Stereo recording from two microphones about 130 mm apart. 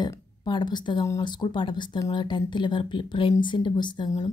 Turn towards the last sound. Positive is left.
turn(degrees=30)  # may be behind; listen again after turning